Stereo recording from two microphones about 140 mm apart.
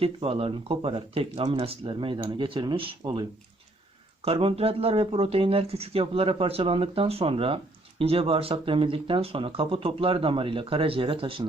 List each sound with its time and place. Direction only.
0.0 s speech: 40° right (ahead or behind)
4.3 s speech: 40° right (ahead or behind)